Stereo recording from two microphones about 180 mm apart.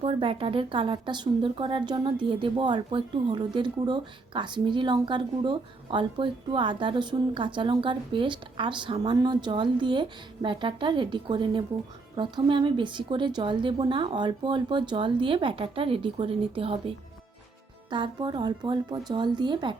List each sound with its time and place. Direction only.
0.0 s speech: 30° right (ahead or behind)
17.9 s speech: 25° right (ahead or behind)